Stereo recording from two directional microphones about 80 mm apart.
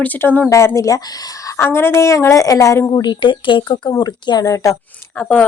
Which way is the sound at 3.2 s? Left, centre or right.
Left.